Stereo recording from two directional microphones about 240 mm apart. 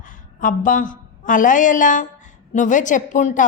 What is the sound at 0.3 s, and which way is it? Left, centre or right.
A woman's voice, left.